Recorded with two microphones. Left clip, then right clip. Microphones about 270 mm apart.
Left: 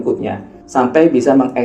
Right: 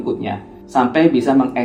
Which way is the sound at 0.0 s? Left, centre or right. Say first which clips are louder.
Left 4 dB; right.